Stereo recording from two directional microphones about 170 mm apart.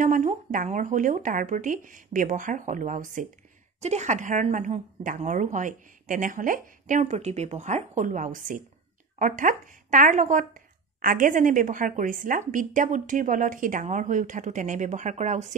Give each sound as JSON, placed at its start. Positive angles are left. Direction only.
{"t": 0.0, "sound": "speech", "side_deg": -50}